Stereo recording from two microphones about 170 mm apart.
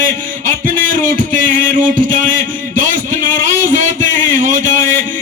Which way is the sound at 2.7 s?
50° right (ahead or behind).